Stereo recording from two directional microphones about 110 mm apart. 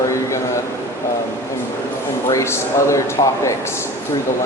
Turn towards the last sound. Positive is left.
turn(degrees=25)  # may be behind; listen again after turning